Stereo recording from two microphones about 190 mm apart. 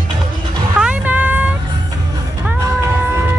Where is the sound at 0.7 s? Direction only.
5° right (ahead or behind).